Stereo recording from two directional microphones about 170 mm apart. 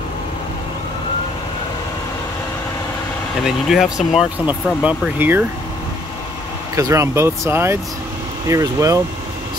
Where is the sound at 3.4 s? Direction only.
5° right (ahead or behind).